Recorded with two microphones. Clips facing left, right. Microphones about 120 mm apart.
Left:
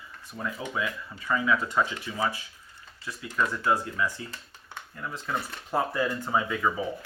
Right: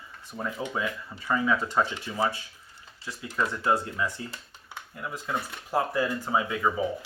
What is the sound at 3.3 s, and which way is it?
Speech, 20° right (ahead or behind).